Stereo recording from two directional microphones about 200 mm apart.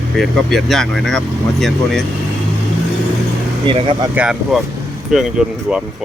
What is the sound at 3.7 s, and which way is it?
Speech, 25° right (ahead or behind).